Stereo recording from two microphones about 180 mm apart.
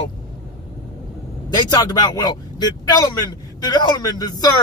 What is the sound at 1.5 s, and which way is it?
Speech, 20° left (ahead or behind).